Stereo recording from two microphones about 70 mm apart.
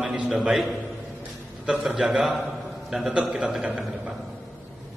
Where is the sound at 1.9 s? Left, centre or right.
Centre.